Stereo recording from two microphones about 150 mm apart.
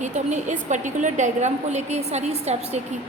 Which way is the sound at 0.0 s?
50° right (ahead or behind).